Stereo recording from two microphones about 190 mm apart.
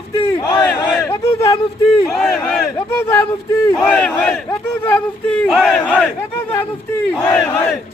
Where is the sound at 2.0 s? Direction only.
Centre (ahead or behind).